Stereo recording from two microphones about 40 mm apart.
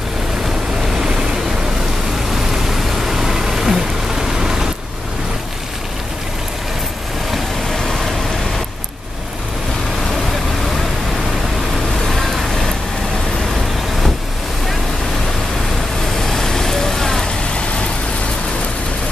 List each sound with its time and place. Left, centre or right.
0.9 s waves: centre
2.3 s vehicle: centre
7.7 s rain: centre
12.1 s vehicle: centre
16.2 s vehicle: centre